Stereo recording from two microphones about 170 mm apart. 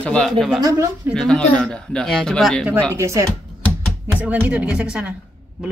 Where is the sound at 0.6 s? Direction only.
15° right (ahead or behind).